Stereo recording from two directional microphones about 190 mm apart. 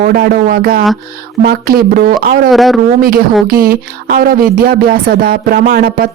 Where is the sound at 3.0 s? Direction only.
50° right (ahead or behind).